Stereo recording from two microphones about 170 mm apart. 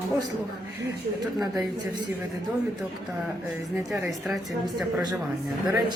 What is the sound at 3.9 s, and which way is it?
Speech, centre (ahead or behind).